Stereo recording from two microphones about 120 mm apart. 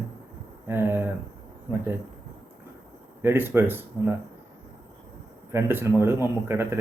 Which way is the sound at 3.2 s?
20° right (ahead or behind).